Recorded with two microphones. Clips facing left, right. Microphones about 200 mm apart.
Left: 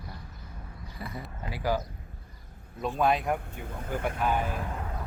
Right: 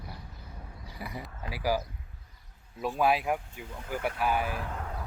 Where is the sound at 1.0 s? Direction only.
10° right (ahead or behind).